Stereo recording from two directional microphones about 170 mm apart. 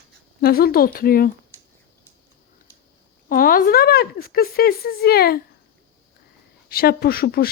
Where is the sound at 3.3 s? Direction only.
55° left (ahead or behind).